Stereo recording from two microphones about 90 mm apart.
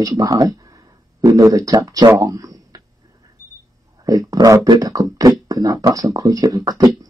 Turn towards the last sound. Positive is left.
turn(degrees=-45)  # may be behind; listen again after turning